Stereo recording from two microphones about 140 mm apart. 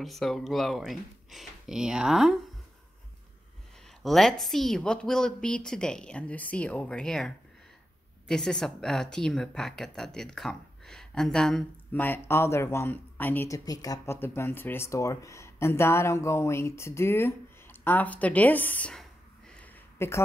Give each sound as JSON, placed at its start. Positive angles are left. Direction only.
{"t": 0.0, "sound": "a woman's voice", "side_deg": 0}
{"t": 4.0, "sound": "a woman's voice", "side_deg": 0}
{"t": 13.5, "sound": "speech", "side_deg": 25}
{"t": 20.0, "sound": "a woman's voice", "side_deg": 20}